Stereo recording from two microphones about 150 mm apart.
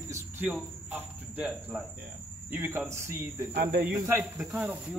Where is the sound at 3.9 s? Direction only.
20° right (ahead or behind).